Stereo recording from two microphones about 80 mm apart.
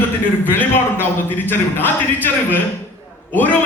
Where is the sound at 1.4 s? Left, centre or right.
Left.